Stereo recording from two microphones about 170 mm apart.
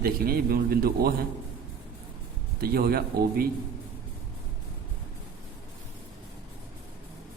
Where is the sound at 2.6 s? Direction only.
65° right (ahead or behind).